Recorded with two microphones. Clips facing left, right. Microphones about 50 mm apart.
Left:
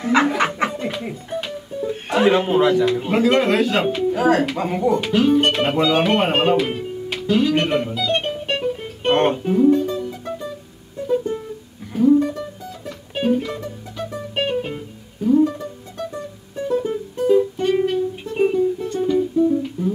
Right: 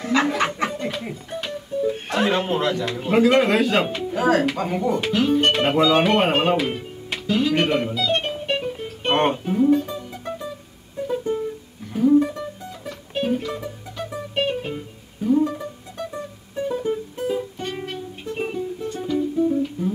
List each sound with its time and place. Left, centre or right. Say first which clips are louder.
0.1 s speech: left 3 dB; centre
7.9 s music: left 1 dB; centre
9.0 s speech: left 3 dB; centre
9.5 s music: left 3 dB; centre
13.1 s music: left 3 dB; centre
14.3 s music: left 1 dB; centre